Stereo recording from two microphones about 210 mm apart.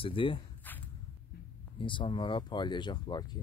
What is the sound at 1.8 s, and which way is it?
Speech, 25° left (ahead or behind).